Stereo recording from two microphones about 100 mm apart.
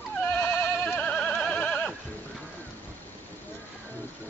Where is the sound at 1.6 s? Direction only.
15° left (ahead or behind).